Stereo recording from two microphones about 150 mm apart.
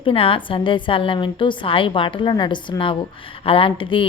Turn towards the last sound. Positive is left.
turn(degrees=35)  # may be behind; listen again after turning